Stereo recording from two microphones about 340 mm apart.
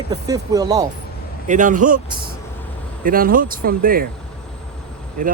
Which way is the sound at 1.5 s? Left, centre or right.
Right.